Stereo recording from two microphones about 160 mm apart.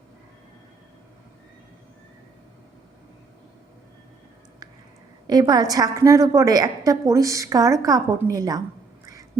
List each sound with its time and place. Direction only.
5.3 s a woman's voice: 25° right (ahead or behind)